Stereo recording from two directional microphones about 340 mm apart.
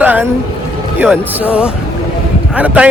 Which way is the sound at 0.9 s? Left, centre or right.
Centre.